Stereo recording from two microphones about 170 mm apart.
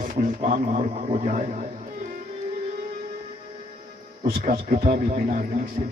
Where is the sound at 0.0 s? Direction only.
50° right (ahead or behind).